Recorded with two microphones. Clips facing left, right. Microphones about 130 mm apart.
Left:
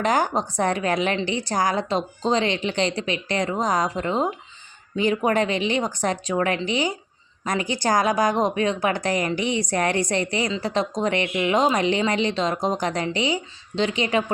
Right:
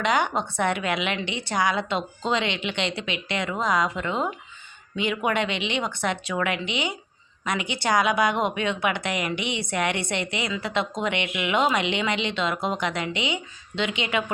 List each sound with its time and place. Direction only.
0.0 s a woman's voice: 40° left (ahead or behind)